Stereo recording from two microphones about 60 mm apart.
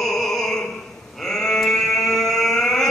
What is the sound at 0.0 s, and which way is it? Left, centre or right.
Opera, centre.